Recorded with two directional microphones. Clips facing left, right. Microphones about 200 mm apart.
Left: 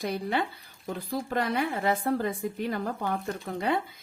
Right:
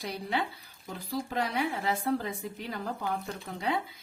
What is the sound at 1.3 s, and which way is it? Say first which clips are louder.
A woman's voice: left 3 dB; 50° left (ahead or behind).